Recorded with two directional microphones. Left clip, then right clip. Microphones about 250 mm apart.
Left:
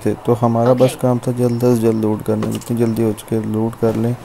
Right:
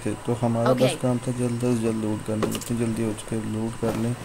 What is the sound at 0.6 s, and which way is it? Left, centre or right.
Speech, centre.